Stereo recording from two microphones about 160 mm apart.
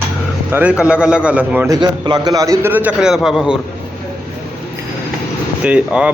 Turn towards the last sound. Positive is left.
turn(degrees=-5)  # may be behind; listen again after turning